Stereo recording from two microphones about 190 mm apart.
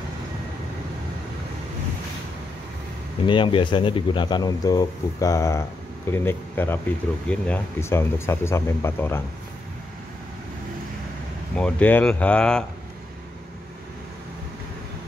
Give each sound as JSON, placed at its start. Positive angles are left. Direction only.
{"t": 3.3, "sound": "speech", "side_deg": 25}
{"t": 11.5, "sound": "speech", "side_deg": 5}